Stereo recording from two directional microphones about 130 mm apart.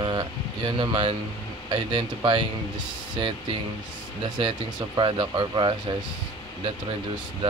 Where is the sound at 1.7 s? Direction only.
40° right (ahead or behind).